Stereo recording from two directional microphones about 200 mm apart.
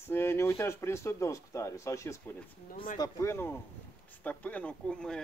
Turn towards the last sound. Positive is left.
turn(degrees=5)  # may be behind; listen again after turning